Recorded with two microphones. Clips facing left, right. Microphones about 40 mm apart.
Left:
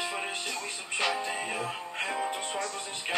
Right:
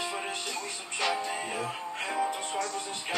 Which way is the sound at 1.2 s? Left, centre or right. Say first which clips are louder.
Even; centre.